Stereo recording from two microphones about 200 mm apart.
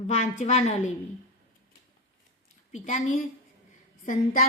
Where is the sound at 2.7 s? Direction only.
35° left (ahead or behind).